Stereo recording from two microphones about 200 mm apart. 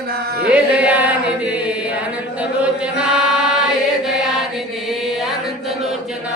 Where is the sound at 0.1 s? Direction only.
50° right (ahead or behind).